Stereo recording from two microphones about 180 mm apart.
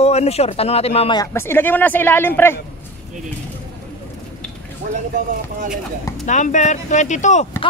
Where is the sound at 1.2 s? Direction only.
15° left (ahead or behind).